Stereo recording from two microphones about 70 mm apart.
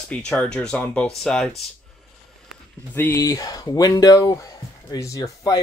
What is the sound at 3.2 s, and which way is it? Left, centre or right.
Speech, left.